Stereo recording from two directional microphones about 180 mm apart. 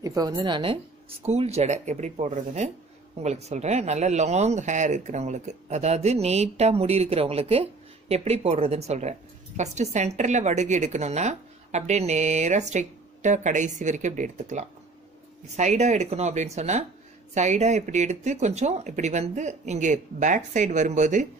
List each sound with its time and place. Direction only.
0.0 s a woman's voice: 20° right (ahead or behind); by 21.3 s 45° right (ahead or behind)